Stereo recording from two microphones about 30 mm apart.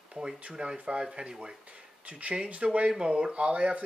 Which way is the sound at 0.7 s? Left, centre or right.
Right.